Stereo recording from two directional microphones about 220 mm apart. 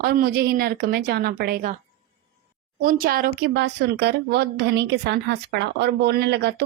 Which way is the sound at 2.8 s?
40° right (ahead or behind).